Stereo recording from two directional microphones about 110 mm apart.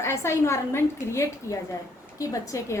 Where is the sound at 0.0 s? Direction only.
25° left (ahead or behind).